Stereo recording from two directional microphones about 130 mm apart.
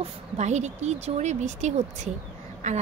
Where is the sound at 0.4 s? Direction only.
60° right (ahead or behind).